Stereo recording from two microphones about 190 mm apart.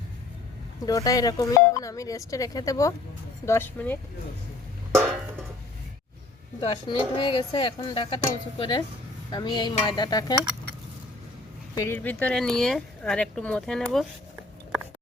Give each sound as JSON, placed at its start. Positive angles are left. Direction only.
{"t": 0.9, "sound": "speech", "side_deg": 20}
{"t": 6.6, "sound": "speech", "side_deg": 25}
{"t": 11.7, "sound": "speech", "side_deg": 15}